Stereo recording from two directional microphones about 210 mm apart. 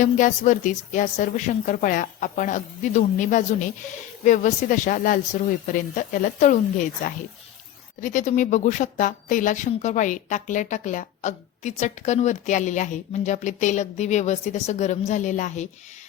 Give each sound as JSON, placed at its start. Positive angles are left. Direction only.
{"t": 0.0, "sound": "a woman's voice", "side_deg": 40}